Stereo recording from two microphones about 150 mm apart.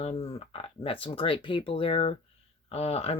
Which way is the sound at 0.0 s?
45° left (ahead or behind).